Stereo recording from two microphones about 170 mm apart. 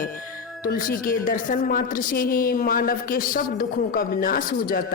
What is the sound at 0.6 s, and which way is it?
A woman's voice, 55° left (ahead or behind).